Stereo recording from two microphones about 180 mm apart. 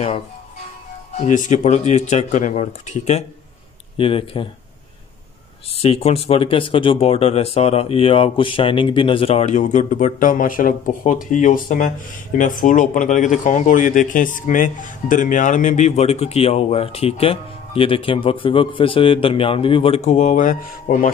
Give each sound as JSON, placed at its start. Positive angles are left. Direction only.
{"t": 1.2, "sound": "a man's voice", "side_deg": 45}
{"t": 5.8, "sound": "a man's voice", "side_deg": 35}